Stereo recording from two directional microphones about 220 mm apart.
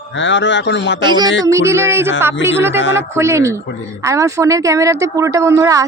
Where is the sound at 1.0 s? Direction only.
20° right (ahead or behind).